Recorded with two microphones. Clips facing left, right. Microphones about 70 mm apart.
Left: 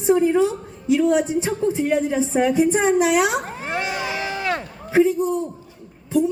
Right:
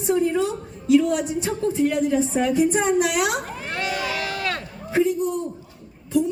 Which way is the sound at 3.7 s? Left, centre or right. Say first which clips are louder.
Even; left.